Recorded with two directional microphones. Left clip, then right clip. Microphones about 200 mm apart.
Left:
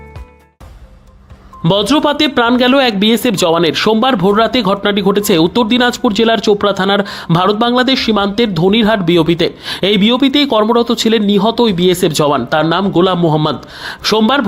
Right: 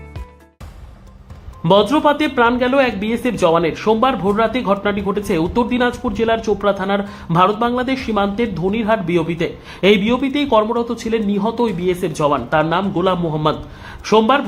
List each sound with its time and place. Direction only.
1.6 s speech: 35° left (ahead or behind)